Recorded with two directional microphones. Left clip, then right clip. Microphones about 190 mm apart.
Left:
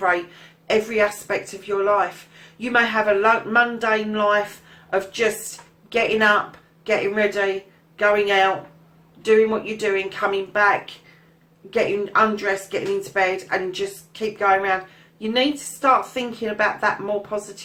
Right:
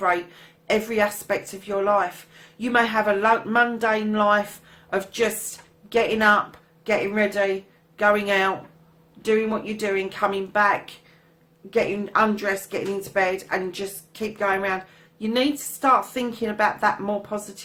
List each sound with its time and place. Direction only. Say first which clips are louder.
0.7 s a woman's voice: left 2 dB; 40° right (ahead or behind)